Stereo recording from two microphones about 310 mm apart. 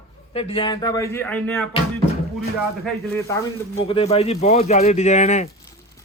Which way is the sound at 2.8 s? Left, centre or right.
Centre.